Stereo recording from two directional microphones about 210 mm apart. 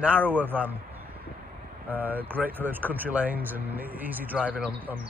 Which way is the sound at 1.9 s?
10° right (ahead or behind).